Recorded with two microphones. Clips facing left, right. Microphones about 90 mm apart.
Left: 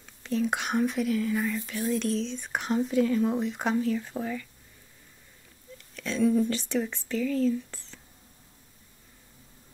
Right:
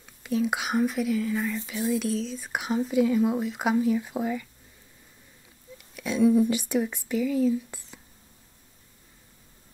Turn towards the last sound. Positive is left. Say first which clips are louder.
# right 2 dB
turn(degrees=-10)  # may be behind; listen again after turning